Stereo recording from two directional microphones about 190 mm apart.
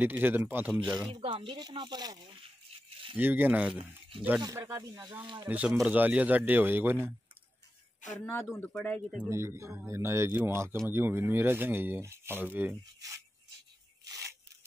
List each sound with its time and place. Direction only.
0.0 s speech: 10° right (ahead or behind)
1.2 s speech: 25° right (ahead or behind)
3.2 s speech: 10° right (ahead or behind)
5.5 s speech: 10° right (ahead or behind)
8.0 s speech: 40° left (ahead or behind)
8.5 s speech: 10° left (ahead or behind)
9.1 s speech: 10° right (ahead or behind)
14.0 s tearing: 20° right (ahead or behind)